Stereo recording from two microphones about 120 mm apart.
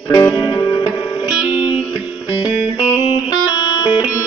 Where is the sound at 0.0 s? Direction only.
35° left (ahead or behind).